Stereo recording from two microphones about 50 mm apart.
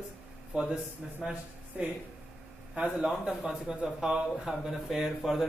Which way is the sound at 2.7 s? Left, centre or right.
Centre.